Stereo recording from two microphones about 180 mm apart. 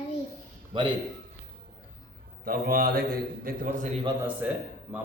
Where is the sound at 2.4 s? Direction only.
55° right (ahead or behind).